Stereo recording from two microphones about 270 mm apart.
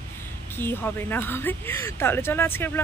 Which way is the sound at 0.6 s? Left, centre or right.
Centre.